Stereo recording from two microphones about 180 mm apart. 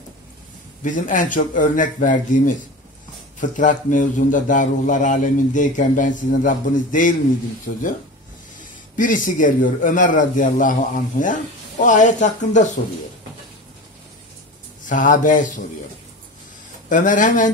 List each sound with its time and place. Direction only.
0.8 s a man's voice: 45° left (ahead or behind)
8.9 s a man's voice: 45° left (ahead or behind)
14.9 s a man's voice: 45° left (ahead or behind)
16.9 s a man's voice: 45° left (ahead or behind)